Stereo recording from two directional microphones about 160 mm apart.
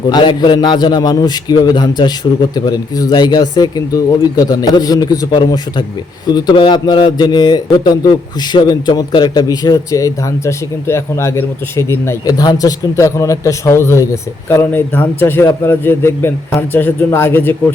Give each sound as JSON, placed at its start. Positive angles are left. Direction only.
{"t": 0.1, "sound": "a man's voice", "side_deg": 30}